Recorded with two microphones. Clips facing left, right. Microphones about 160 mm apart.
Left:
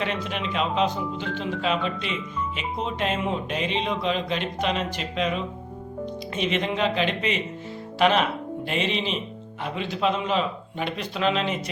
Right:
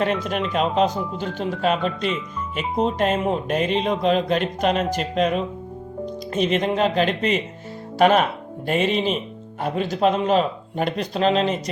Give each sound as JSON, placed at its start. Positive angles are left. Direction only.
{"t": 0.0, "sound": "speech", "side_deg": -45}